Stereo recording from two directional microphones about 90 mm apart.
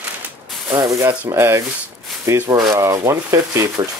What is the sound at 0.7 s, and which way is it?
Speech, 35° right (ahead or behind).